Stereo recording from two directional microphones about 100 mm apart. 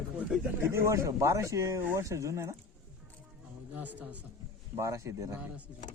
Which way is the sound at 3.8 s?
15° right (ahead or behind).